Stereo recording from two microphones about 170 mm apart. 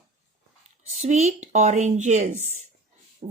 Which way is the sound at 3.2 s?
55° right (ahead or behind).